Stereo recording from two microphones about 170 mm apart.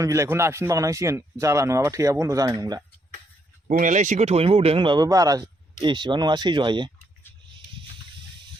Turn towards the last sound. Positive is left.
turn(degrees=-30)  # may be behind; listen again after turning